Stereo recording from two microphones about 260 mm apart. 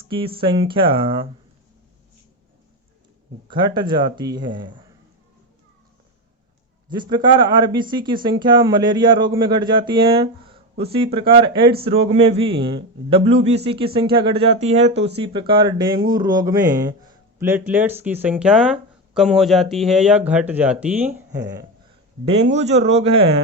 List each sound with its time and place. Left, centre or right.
0.1 s a man's voice: centre
3.5 s speech: centre
6.9 s a man's voice: centre
22.3 s a man's voice: right